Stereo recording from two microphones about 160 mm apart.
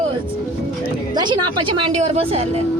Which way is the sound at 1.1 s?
30° right (ahead or behind).